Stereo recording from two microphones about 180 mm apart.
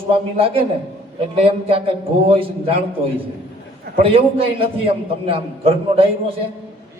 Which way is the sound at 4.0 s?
30° right (ahead or behind).